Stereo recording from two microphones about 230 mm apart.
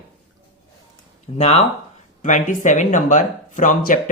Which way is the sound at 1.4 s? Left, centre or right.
Left.